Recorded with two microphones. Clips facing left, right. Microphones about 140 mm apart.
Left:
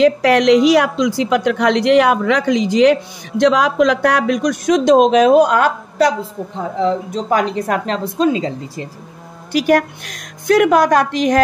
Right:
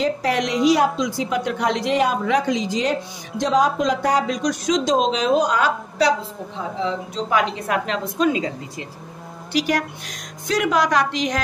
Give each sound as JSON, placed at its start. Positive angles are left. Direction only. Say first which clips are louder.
{"t": 0.0, "sound": "a woman's voice", "louder": "left 9 dB", "side_deg": 80}
{"t": 9.5, "sound": "a woman's voice", "louder": "left 7 dB", "side_deg": 50}